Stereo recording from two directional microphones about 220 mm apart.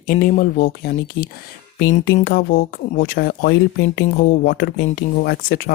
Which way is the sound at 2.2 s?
45° left (ahead or behind).